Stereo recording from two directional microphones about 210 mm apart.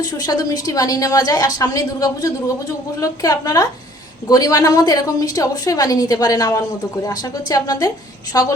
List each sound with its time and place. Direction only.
0.0 s a woman's voice: 15° left (ahead or behind)